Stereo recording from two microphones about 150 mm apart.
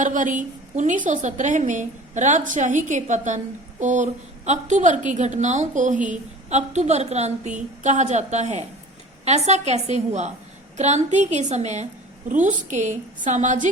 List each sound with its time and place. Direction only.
0.0 s a woman's voice: 60° right (ahead or behind)